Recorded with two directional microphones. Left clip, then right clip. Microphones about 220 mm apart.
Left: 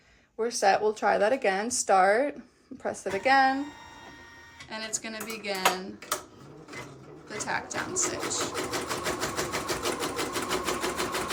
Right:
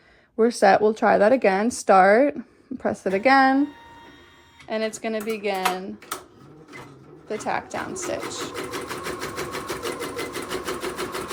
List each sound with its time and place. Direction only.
0.3 s a woman's voice: 30° right (ahead or behind)
4.7 s speech: 15° right (ahead or behind)
7.3 s speech: 10° right (ahead or behind)
8.5 s sewing machine: centre (ahead or behind)